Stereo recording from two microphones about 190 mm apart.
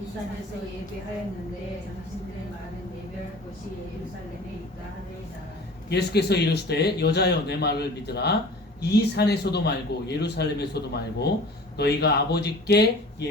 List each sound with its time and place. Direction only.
5.9 s speech: 60° left (ahead or behind)